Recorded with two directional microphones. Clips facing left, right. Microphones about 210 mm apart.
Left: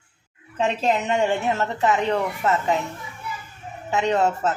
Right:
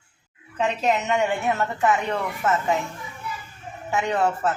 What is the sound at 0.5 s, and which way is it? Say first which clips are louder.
A woman's voice: left 1 dB; 30° left (ahead or behind).